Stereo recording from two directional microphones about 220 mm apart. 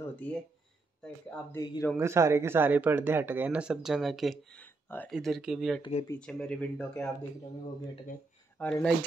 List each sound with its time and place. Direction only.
0.0 s a sound: 10° left (ahead or behind)
1.0 s speech: 15° left (ahead or behind)
2.0 s speech: 10° right (ahead or behind)
5.8 s speech: 30° left (ahead or behind)
6.0 s speech: 5° left (ahead or behind)
8.5 s speech: 5° left (ahead or behind)